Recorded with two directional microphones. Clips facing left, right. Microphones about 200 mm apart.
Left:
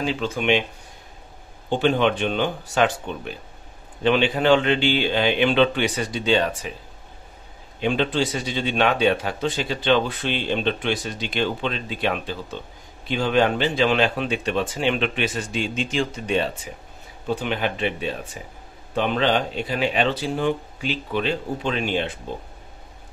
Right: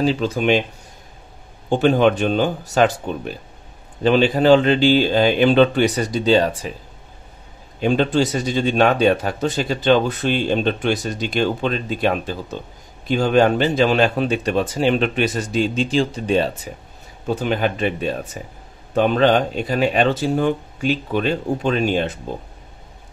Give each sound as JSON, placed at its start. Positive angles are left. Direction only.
{"t": 0.0, "sound": "speech", "side_deg": -35}
{"t": 1.7, "sound": "speech", "side_deg": -45}
{"t": 7.8, "sound": "speech", "side_deg": -40}